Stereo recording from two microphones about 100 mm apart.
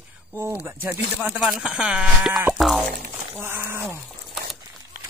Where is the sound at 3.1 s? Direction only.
20° right (ahead or behind).